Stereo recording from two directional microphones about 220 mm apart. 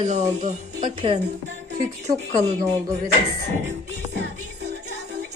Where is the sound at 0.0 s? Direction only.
30° right (ahead or behind).